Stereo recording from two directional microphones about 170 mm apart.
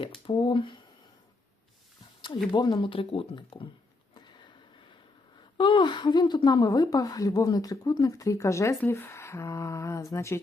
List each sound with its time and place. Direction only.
0.3 s a woman's voice: 30° left (ahead or behind)
2.5 s a woman's voice: 25° left (ahead or behind)
5.5 s a woman's voice: 25° left (ahead or behind)